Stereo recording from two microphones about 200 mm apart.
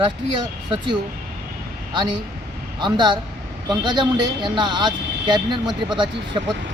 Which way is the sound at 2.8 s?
20° right (ahead or behind).